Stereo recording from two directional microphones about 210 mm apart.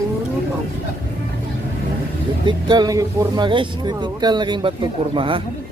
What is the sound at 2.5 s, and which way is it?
Speech, 20° right (ahead or behind).